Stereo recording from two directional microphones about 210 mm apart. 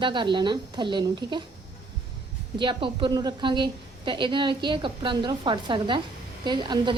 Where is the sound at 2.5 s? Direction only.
25° right (ahead or behind).